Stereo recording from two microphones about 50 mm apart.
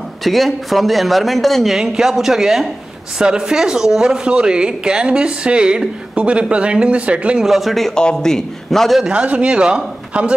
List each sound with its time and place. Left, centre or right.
0.2 s speech: centre
1.8 s speech: centre
7.4 s speech: centre
7.9 s a man's voice: centre
9.1 s speech: right